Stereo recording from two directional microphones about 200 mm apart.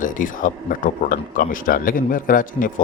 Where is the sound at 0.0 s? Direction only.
40° left (ahead or behind).